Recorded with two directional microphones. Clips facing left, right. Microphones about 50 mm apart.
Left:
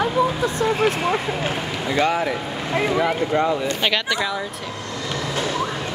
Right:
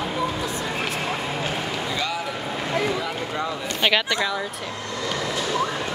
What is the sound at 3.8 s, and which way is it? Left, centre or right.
Speech, centre.